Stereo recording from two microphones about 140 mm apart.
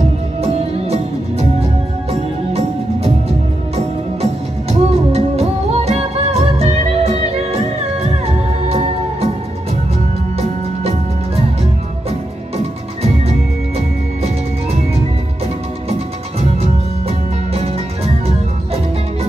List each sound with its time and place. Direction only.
0.4 s music: 45° right (ahead or behind)
2.0 s music: 45° right (ahead or behind)
8.6 s music: 50° right (ahead or behind)
10.4 s music: 45° right (ahead or behind)
17.6 s music: 45° right (ahead or behind)